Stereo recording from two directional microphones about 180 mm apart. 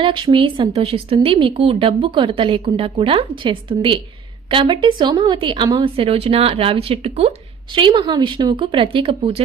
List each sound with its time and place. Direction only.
0.0 s a woman's voice: 30° right (ahead or behind)